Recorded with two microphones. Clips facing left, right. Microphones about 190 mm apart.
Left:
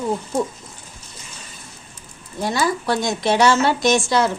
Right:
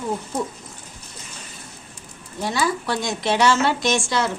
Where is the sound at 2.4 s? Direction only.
40° left (ahead or behind).